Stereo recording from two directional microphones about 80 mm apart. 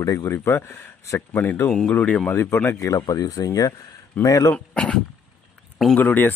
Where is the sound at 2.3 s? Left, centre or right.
Left.